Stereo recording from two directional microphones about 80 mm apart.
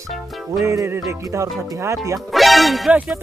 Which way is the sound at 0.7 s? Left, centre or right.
Right.